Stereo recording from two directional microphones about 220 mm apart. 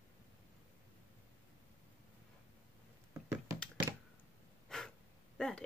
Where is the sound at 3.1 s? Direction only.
15° right (ahead or behind).